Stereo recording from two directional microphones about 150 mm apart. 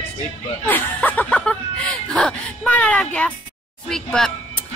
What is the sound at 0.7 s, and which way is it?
A woman's voice, 10° left (ahead or behind).